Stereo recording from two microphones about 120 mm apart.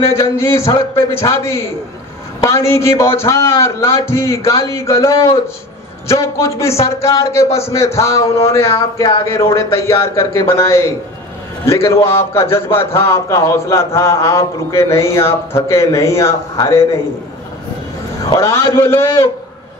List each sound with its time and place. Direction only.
0.2 s a man's voice: 25° left (ahead or behind)
18.3 s a man's voice: 25° left (ahead or behind)